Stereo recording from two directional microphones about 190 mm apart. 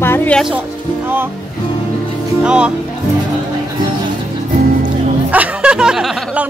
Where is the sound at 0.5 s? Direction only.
10° right (ahead or behind).